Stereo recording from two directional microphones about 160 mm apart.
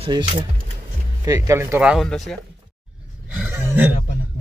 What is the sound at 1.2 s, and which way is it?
Speech, 20° right (ahead or behind).